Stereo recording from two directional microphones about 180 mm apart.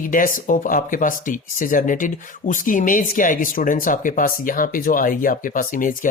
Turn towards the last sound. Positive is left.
turn(degrees=50)  # may be behind; listen again after turning